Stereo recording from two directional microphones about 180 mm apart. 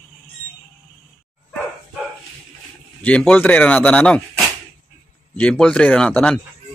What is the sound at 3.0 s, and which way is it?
A man's voice, 5° left (ahead or behind).